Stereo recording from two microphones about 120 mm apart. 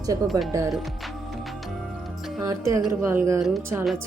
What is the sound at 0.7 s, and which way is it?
Music, centre (ahead or behind).